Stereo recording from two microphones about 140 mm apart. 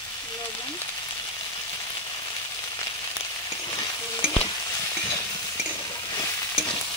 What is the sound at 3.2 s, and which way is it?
Frying, 30° left (ahead or behind).